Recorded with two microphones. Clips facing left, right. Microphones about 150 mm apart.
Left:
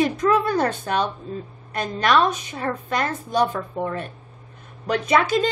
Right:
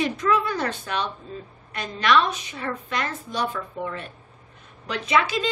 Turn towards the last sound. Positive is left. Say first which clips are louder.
# left 4 dB
turn(degrees=45)  # may be behind; listen again after turning